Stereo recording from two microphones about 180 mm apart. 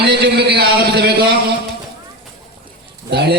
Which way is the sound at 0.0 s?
65° right (ahead or behind).